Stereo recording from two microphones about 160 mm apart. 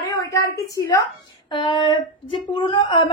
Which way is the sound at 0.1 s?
20° left (ahead or behind).